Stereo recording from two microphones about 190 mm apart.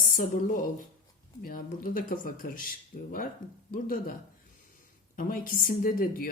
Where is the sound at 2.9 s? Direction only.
40° left (ahead or behind).